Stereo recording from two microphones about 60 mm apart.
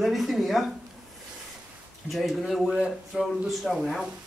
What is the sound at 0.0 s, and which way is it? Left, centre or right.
Speech, centre.